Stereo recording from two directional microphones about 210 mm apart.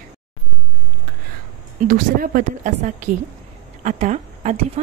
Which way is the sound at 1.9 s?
40° right (ahead or behind).